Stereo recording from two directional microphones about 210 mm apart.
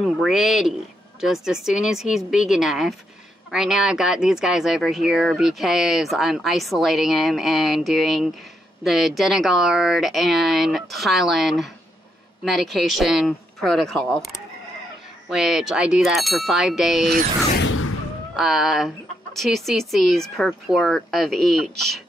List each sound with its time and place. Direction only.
0.0 s speech: centre (ahead or behind)
17.6 s a sound: 75° left (ahead or behind)
18.3 s speech: centre (ahead or behind)